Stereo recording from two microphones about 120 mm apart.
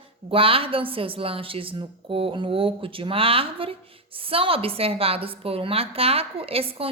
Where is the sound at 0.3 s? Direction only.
50° right (ahead or behind).